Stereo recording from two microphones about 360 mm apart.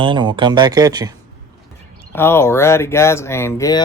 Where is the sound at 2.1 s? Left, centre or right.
Centre.